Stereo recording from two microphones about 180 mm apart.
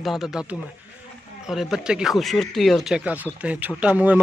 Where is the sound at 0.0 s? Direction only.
Centre (ahead or behind).